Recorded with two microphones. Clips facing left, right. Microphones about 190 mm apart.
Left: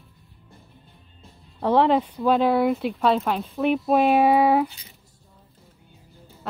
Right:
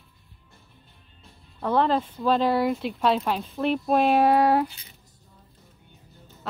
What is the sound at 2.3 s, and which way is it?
Speech, centre (ahead or behind).